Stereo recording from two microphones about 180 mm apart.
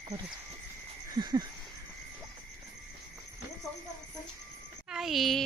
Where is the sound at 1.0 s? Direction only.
20° right (ahead or behind).